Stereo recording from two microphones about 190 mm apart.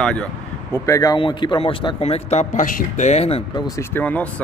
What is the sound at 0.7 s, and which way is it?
A man's voice, 15° left (ahead or behind).